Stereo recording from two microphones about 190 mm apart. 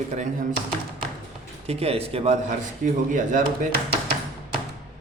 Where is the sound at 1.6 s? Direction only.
30° right (ahead or behind).